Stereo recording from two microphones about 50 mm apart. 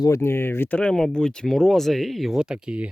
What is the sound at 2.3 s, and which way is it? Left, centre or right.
Speech, centre.